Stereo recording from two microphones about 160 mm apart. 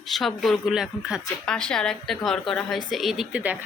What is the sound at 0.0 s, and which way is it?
A woman's voice, centre (ahead or behind).